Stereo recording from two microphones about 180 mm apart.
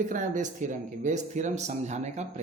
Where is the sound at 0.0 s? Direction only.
45° right (ahead or behind).